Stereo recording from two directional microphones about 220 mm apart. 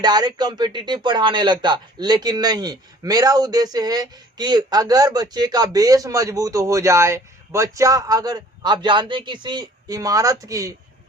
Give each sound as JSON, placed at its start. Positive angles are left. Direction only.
{"t": 0.0, "sound": "speech", "side_deg": -20}